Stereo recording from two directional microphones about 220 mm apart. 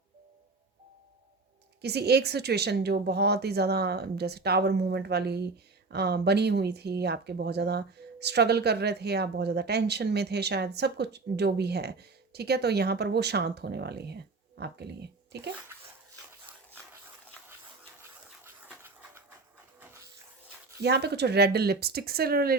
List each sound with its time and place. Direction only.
1.8 s speech: 50° right (ahead or behind)
18.4 s dog: 10° right (ahead or behind)
20.8 s speech: 50° right (ahead or behind)